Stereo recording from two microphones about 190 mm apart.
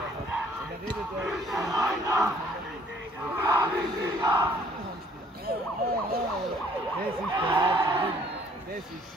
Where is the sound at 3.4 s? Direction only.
15° right (ahead or behind).